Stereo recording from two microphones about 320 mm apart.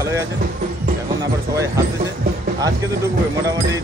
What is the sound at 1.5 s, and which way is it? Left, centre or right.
Speech, centre.